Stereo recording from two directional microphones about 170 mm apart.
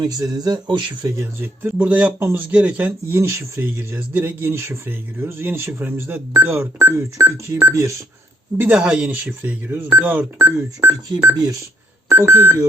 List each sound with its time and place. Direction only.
0.0 s speech: 25° right (ahead or behind)